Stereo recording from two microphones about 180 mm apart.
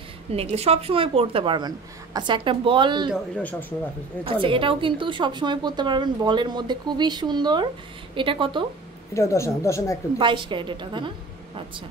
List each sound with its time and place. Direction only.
0.3 s a woman's voice: 35° right (ahead or behind)
4.2 s a woman's voice: 30° right (ahead or behind)
9.1 s speech: 15° left (ahead or behind)
10.1 s a woman's voice: 25° right (ahead or behind)